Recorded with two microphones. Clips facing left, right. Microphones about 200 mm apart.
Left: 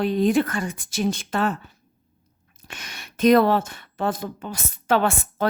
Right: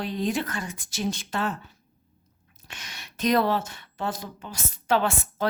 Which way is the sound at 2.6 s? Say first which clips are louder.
Left 4 dB; 50° left (ahead or behind).